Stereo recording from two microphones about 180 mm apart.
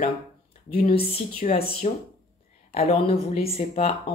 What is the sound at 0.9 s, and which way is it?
Speech, 35° left (ahead or behind).